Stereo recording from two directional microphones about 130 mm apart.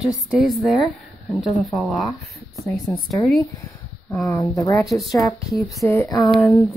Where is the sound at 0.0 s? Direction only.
5° right (ahead or behind).